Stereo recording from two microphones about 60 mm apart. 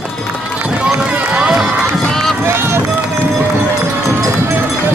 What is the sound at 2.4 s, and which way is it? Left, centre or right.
Run, right.